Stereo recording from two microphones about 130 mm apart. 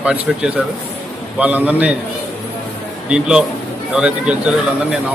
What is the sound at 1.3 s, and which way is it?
Speech, 10° right (ahead or behind).